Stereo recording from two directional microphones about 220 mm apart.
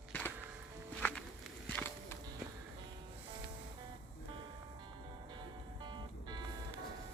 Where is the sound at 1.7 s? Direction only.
5° left (ahead or behind).